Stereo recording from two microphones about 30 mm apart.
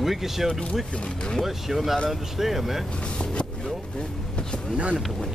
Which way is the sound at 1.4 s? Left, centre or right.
Centre.